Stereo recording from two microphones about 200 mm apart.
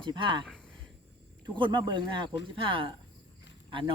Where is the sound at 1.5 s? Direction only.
25° right (ahead or behind).